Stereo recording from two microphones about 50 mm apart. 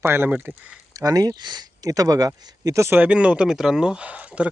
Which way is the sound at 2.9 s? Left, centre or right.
Right.